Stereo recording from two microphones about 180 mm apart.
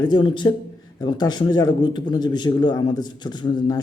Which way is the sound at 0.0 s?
25° left (ahead or behind).